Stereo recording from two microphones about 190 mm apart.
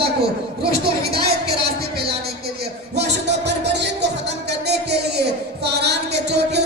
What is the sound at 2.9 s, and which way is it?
Music, 60° right (ahead or behind).